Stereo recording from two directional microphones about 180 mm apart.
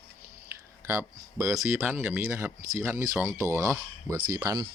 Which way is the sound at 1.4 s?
Centre (ahead or behind).